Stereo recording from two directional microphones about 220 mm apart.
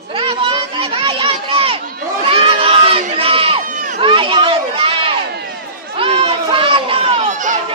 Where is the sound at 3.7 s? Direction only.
35° right (ahead or behind).